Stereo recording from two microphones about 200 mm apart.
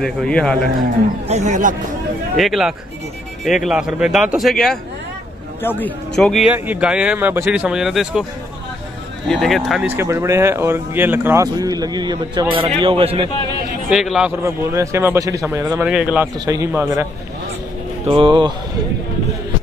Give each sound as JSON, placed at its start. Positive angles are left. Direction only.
{"t": 0.0, "sound": "speech", "side_deg": 5}
{"t": 1.2, "sound": "speech", "side_deg": -35}
{"t": 2.3, "sound": "speech", "side_deg": 0}
{"t": 9.3, "sound": "speech", "side_deg": 0}
{"t": 13.8, "sound": "speech", "side_deg": -5}
{"t": 14.4, "sound": "speech", "side_deg": -15}
{"t": 15.8, "sound": "speech", "side_deg": -5}
{"t": 16.3, "sound": "speech", "side_deg": -15}
{"t": 18.0, "sound": "speech", "side_deg": -25}